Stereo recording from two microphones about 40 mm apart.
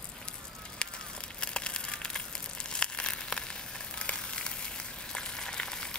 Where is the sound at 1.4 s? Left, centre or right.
Left.